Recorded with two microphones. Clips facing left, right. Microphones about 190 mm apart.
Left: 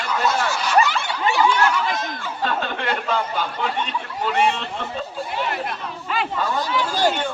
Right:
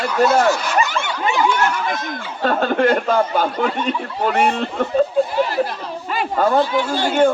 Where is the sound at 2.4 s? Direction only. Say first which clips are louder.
Right 9 dB; 45° right (ahead or behind).